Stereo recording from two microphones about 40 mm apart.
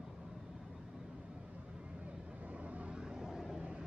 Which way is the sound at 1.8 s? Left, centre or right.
Right.